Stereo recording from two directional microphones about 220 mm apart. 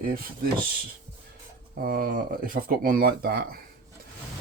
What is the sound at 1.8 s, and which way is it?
Speech, 40° right (ahead or behind).